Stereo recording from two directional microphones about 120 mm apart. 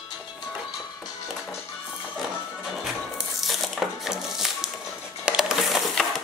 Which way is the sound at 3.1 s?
Centre (ahead or behind).